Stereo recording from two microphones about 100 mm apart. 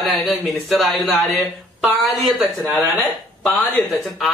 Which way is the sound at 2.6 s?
Centre (ahead or behind).